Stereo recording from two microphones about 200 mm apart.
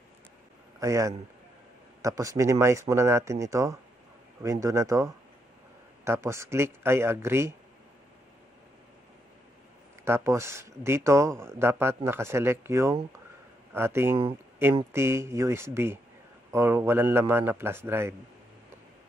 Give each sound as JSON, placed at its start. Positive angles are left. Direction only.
{"t": 0.7, "sound": "speech", "side_deg": -15}
{"t": 10.0, "sound": "speech", "side_deg": -15}